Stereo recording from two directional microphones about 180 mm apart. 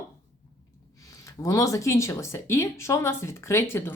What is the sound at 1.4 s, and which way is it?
Speech, 15° left (ahead or behind).